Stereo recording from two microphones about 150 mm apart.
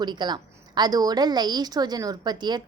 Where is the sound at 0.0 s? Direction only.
30° right (ahead or behind).